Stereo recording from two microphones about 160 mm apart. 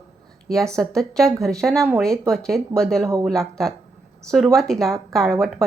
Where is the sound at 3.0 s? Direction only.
20° right (ahead or behind).